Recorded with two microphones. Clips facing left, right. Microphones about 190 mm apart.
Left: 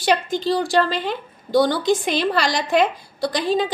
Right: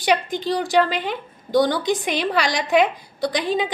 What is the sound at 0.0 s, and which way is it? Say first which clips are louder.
A woman's voice: left 1 dB; 15° right (ahead or behind).